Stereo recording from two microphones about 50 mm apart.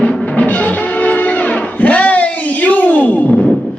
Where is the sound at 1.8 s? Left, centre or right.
Left.